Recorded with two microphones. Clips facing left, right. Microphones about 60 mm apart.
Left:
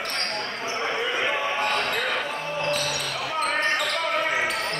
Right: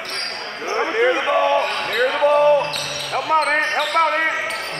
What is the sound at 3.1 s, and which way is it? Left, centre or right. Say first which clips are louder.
Basketball bounce: right 12 dB; right.